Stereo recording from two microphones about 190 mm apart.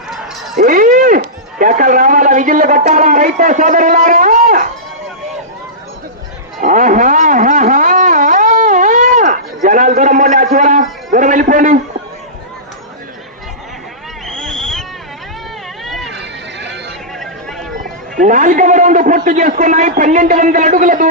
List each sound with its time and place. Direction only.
0.5 s speech: 45° right (ahead or behind)
6.6 s a sound: 40° right (ahead or behind)
14.3 s owl: 5° left (ahead or behind)
15.8 s cat: centre (ahead or behind)
16.1 s a sound: 65° right (ahead or behind)
18.2 s a man's voice: 40° right (ahead or behind)